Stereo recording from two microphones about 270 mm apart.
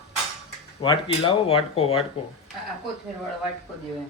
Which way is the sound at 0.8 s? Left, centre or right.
Centre.